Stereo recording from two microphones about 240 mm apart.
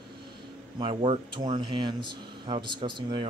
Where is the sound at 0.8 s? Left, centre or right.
Right.